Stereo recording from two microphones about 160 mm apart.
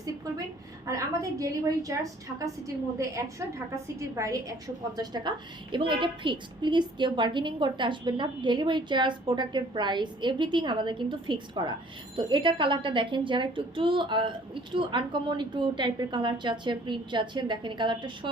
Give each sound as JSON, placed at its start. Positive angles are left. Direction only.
{"t": 0.9, "sound": "a woman's voice", "side_deg": -20}
{"t": 4.1, "sound": "a woman's voice", "side_deg": -20}